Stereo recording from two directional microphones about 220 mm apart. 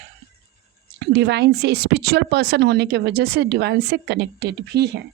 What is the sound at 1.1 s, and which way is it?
A woman's voice, 50° right (ahead or behind).